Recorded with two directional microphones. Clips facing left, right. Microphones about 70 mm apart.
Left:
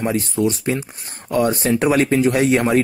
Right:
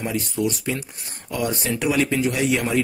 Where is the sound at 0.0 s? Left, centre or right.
Left.